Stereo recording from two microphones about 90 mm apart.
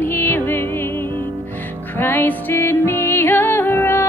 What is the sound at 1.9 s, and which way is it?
Music, 20° left (ahead or behind).